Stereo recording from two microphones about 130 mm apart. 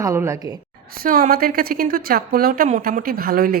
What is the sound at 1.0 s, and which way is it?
A woman's voice, 90° right.